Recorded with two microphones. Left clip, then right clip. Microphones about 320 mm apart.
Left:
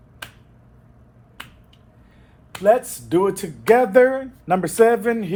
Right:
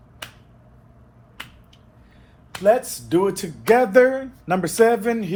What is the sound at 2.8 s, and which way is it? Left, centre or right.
Speech, left.